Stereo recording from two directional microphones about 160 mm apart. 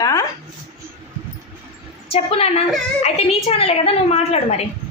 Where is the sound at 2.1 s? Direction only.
35° left (ahead or behind).